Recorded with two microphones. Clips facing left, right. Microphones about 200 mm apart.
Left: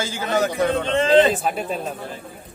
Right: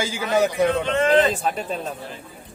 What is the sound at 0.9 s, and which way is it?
Speech, 25° left (ahead or behind).